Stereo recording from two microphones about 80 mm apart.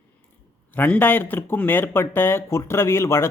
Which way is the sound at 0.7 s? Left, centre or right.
Left.